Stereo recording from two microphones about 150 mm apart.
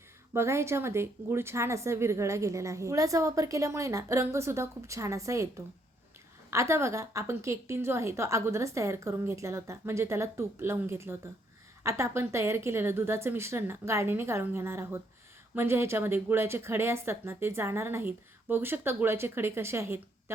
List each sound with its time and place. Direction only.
0.3 s a woman's voice: 20° right (ahead or behind)
6.5 s a woman's voice: 20° right (ahead or behind)